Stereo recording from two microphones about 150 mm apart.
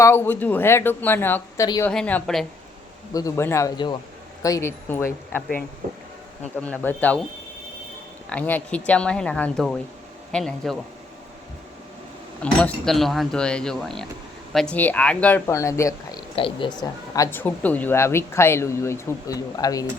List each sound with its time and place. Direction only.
0.0 s speech: 15° left (ahead or behind)
3.1 s speech: 25° left (ahead or behind)
6.6 s speech: 10° left (ahead or behind)
8.3 s speech: 10° left (ahead or behind)
12.4 s speech: 5° left (ahead or behind); by 16.2 s 20° left (ahead or behind)
16.3 s speech: 35° left (ahead or behind)
17.3 s speech: 10° left (ahead or behind)